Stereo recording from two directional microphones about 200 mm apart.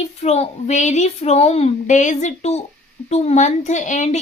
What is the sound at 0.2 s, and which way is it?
A woman's voice, 35° left (ahead or behind).